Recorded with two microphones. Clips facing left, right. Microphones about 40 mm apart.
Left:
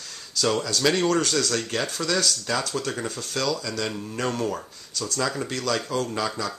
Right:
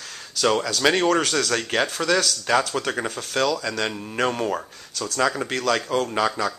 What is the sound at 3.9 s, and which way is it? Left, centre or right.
Speech, right.